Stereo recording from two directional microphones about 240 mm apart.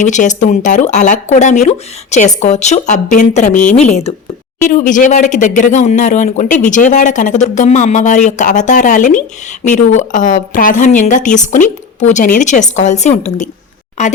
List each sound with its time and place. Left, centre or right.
0.0 s speech: left